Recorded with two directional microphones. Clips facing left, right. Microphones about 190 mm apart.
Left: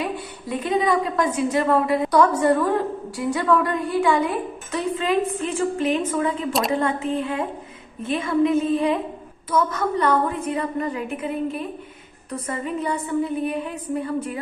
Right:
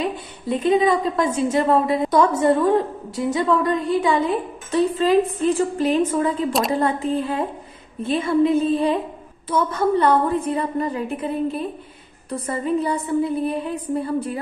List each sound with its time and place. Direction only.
0.0 s a woman's voice: 25° right (ahead or behind)
4.6 s a woman's voice: 30° right (ahead or behind)